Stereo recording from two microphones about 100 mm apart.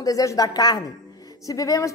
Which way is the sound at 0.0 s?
35° left (ahead or behind).